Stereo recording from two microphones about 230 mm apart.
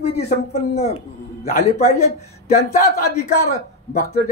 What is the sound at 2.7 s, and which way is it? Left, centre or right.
Speech, left.